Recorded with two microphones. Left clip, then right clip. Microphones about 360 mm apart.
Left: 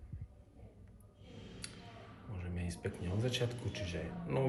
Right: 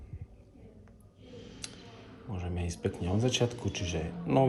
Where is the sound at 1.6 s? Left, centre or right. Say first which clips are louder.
Right 6 dB; centre.